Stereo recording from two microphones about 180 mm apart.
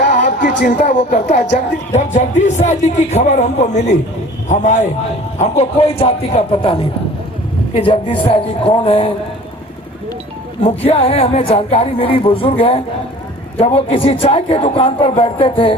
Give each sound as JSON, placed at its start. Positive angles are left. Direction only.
{"t": 0.0, "sound": "music", "side_deg": 45}
{"t": 0.7, "sound": "speech", "side_deg": 45}
{"t": 10.6, "sound": "speech", "side_deg": 35}